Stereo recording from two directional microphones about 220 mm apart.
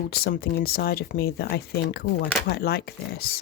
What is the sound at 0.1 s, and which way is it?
Speech, 45° left (ahead or behind).